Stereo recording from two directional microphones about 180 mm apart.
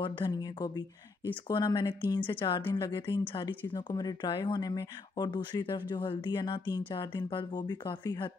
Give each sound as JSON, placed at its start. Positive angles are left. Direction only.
{"t": 0.0, "sound": "speech", "side_deg": 25}